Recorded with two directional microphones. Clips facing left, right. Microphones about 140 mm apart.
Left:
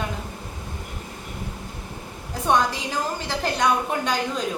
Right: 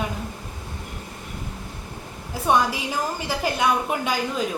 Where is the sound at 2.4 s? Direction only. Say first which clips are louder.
Right 1 dB; 10° right (ahead or behind).